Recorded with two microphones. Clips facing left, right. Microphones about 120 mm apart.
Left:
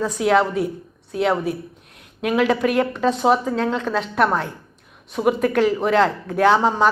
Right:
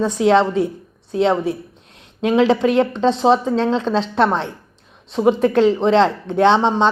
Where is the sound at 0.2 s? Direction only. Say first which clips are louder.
Right 3 dB; 25° right (ahead or behind).